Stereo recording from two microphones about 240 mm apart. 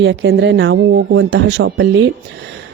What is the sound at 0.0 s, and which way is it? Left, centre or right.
Speech, right.